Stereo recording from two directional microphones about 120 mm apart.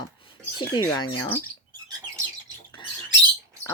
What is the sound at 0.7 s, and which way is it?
Speech, 35° left (ahead or behind).